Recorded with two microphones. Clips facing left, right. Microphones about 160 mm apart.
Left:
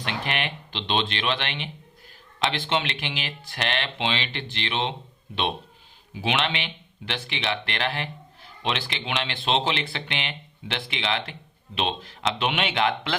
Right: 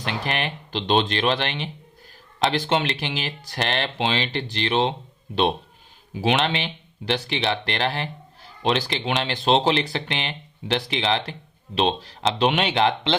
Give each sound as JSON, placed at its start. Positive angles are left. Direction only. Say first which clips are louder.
{"t": 0.0, "sound": "speech", "louder": "right 2 dB", "side_deg": -40}